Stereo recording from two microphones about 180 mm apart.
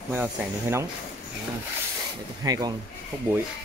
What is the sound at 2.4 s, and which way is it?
Speech, 20° right (ahead or behind).